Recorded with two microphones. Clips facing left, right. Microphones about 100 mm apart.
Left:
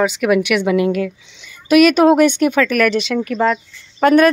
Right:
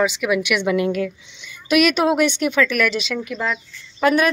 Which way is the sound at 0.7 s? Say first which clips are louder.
Left 4 dB; 30° left (ahead or behind).